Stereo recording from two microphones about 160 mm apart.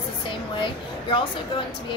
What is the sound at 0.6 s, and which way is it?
Speech, 30° left (ahead or behind).